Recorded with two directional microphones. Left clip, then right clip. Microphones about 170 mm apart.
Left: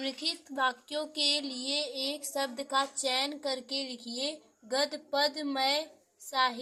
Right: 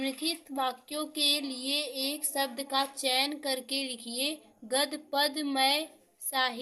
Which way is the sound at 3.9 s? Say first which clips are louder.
Right 1 dB; 20° left (ahead or behind).